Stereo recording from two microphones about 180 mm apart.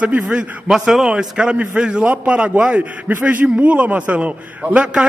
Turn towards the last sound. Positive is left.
turn(degrees=-5)  # may be behind; listen again after turning